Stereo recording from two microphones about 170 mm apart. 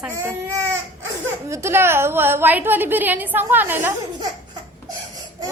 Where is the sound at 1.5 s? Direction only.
15° right (ahead or behind).